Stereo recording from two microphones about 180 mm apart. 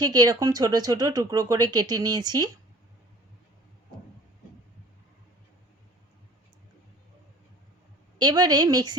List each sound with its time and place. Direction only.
0.0 s speech: 20° right (ahead or behind)
8.2 s speech: 20° right (ahead or behind)